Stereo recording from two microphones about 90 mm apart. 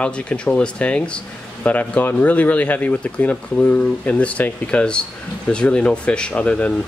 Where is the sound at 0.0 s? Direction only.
10° left (ahead or behind).